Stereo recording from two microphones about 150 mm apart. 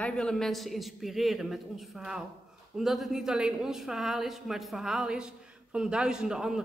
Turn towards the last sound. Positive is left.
turn(degrees=-5)  # may be behind; listen again after turning